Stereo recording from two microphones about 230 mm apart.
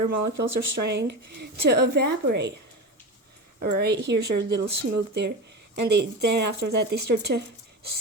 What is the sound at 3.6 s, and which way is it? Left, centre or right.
Speech, right.